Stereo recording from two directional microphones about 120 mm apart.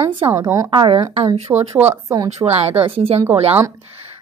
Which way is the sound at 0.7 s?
45° right (ahead or behind).